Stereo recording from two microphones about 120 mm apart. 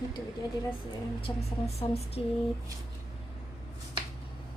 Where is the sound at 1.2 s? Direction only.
60° left (ahead or behind).